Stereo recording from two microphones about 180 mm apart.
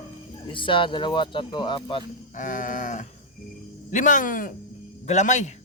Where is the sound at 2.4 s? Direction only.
50° left (ahead or behind).